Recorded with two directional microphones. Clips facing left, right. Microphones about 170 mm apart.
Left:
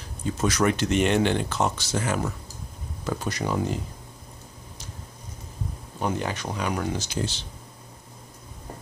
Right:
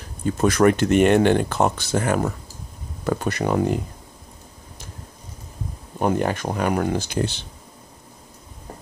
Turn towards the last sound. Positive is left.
turn(degrees=-60)  # may be behind; listen again after turning